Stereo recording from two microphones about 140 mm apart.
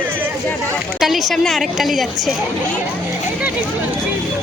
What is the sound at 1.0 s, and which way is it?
A woman's voice, centre (ahead or behind).